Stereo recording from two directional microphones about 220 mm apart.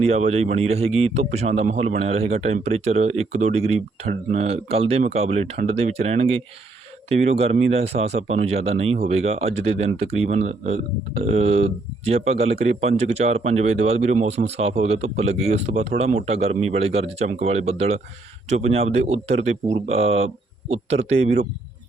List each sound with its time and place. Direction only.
0.0 s speech: 30° right (ahead or behind)